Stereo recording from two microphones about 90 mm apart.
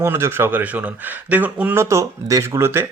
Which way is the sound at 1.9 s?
35° right (ahead or behind).